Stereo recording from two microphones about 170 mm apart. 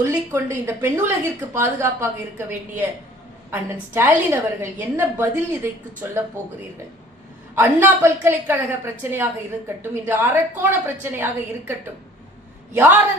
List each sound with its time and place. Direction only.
0.0 s a woman's voice: 15° right (ahead or behind)
7.5 s a woman's voice: 15° right (ahead or behind)
12.7 s a woman's voice: 15° right (ahead or behind)